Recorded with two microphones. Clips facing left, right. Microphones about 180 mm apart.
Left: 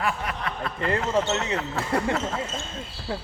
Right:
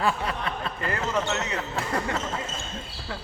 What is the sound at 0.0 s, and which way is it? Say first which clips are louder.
Speech: right 2 dB; 30° right (ahead or behind).